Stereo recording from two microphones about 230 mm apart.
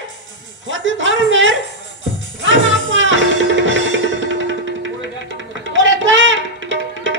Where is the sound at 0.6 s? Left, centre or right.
Right.